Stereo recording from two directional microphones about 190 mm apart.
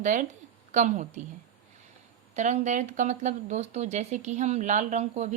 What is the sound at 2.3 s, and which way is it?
Speech, 40° right (ahead or behind).